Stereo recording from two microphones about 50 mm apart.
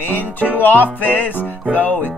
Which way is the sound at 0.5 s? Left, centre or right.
Left.